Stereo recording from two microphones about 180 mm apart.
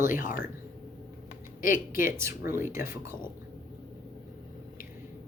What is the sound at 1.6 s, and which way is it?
Speech, 50° left (ahead or behind).